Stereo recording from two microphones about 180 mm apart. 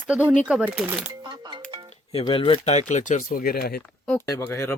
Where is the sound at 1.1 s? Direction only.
25° right (ahead or behind).